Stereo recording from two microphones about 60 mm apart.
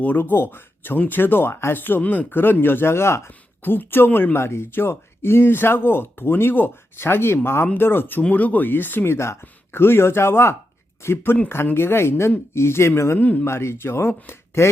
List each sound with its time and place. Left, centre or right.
0.0 s speech: left
3.6 s speech: left
9.1 s speech: left
9.4 s speech: left
13.1 s speech: left
13.4 s speech: left